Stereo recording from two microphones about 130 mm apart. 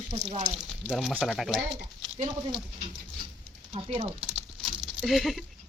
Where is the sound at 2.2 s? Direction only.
35° right (ahead or behind).